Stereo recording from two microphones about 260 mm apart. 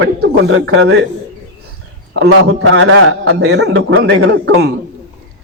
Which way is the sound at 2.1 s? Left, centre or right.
Right.